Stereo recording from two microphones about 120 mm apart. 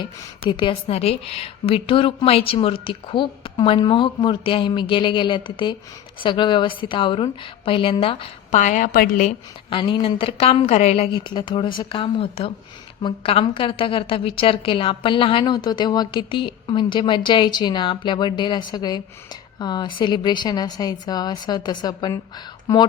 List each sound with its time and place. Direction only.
0.0 s a woman's voice: 40° left (ahead or behind)
0.9 s a woman's voice: 60° left (ahead or behind)
8.5 s a woman's voice: 90° left
9.6 s a woman's voice: 40° left (ahead or behind); by 11.1 s 60° left (ahead or behind)
11.1 s a woman's voice: 40° left (ahead or behind)